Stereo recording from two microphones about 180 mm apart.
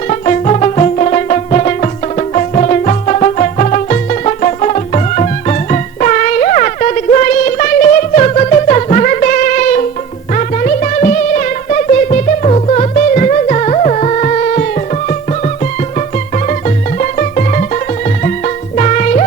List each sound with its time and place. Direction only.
0.1 s music: 40° left (ahead or behind)